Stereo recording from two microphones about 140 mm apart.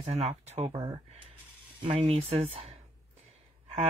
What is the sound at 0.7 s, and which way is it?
Speech, 30° right (ahead or behind).